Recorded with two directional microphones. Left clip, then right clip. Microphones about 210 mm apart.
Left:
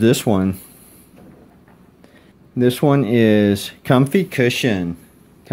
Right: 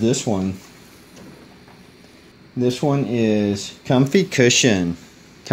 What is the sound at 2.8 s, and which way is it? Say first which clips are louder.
Speech: left 7 dB; 40° left (ahead or behind).